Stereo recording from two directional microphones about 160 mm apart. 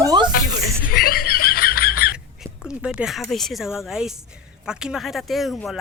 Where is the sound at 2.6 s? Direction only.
5° right (ahead or behind).